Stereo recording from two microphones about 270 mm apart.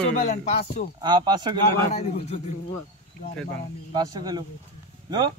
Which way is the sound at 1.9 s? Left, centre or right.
Left.